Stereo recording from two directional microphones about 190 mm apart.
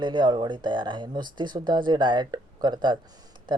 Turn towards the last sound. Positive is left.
turn(degrees=-25)  # may be behind; listen again after turning